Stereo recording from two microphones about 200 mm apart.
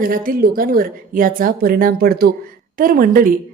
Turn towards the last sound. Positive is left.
turn(degrees=-45)  # may be behind; listen again after turning